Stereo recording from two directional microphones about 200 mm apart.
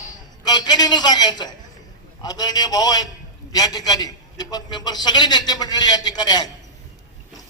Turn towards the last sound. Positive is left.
turn(degrees=20)  # may be behind; listen again after turning